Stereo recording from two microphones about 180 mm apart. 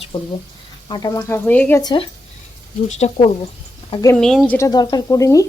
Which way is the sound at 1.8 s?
25° left (ahead or behind).